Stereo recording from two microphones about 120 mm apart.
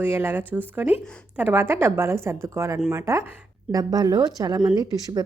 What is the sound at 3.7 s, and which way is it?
Speech, 35° right (ahead or behind).